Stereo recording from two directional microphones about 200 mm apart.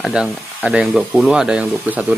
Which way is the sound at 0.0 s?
5° right (ahead or behind).